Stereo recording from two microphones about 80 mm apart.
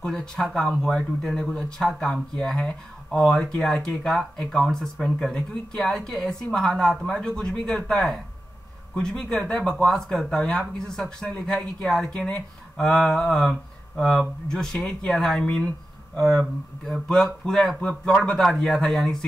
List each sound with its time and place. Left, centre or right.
0.0 s speech: centre
11.8 s speech: centre